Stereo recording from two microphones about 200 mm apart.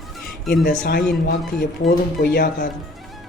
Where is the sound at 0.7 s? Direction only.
50° left (ahead or behind).